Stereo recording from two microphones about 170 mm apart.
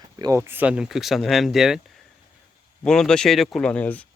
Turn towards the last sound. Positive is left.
turn(degrees=10)  # may be behind; listen again after turning